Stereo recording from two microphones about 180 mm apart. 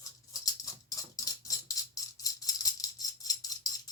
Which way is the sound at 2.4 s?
20° left (ahead or behind).